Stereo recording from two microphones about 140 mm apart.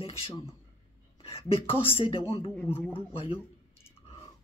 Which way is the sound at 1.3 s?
40° left (ahead or behind).